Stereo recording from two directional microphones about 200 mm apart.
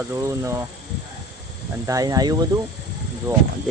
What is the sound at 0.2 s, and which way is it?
Speech, 15° right (ahead or behind).